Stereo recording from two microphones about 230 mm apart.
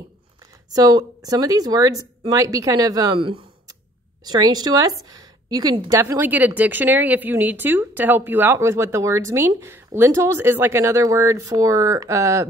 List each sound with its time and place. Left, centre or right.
0.7 s a woman's voice: centre